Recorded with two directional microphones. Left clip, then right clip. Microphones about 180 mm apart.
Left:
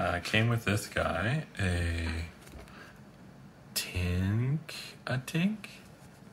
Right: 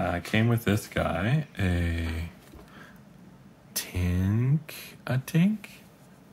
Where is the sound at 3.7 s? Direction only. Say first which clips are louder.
Right 1 dB; 20° right (ahead or behind).